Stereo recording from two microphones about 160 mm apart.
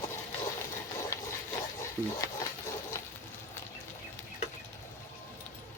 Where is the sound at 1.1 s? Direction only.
15° left (ahead or behind).